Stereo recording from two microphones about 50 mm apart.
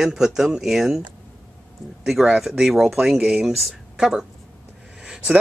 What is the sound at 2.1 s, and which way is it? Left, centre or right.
Speech, centre.